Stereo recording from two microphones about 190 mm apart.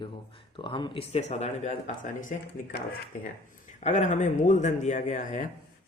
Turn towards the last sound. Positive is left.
turn(degrees=45)  # may be behind; listen again after turning